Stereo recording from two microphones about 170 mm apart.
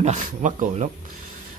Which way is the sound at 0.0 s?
45° right (ahead or behind).